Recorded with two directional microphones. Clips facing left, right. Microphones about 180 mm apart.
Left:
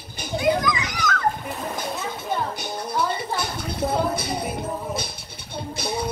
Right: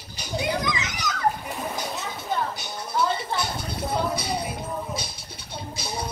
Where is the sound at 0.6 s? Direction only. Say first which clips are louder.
Left 4 dB; 25° right (ahead or behind).